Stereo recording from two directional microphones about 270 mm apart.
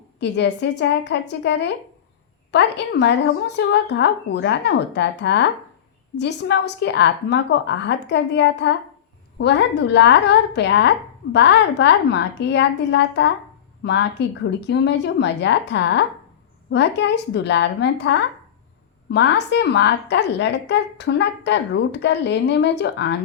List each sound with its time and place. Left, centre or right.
0.2 s a woman's voice: left